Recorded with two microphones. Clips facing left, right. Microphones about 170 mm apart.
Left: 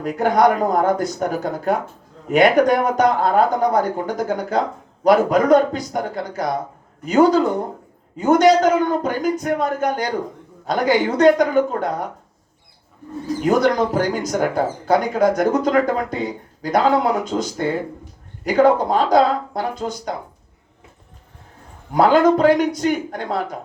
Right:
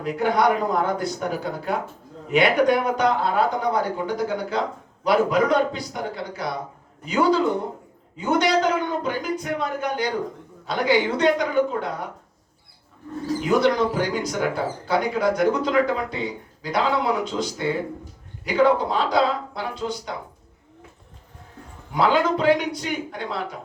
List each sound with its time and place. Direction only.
0.0 s speech: 45° left (ahead or behind)
13.4 s speech: 45° left (ahead or behind)
21.9 s speech: 45° left (ahead or behind)